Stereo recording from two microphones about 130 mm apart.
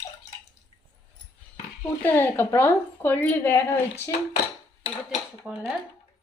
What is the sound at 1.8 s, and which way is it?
A woman's voice, 10° left (ahead or behind).